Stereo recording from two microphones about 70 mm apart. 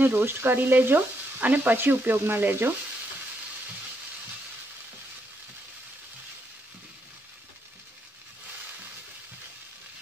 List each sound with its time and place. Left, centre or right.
0.0 s frying: right